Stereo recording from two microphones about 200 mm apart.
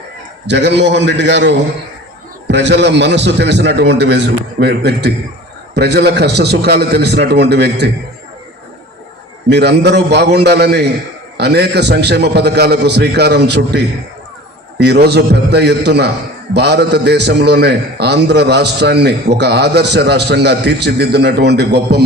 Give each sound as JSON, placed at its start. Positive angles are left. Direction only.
{"t": 0.4, "sound": "a man's voice", "side_deg": -60}
{"t": 9.5, "sound": "a man's voice", "side_deg": -55}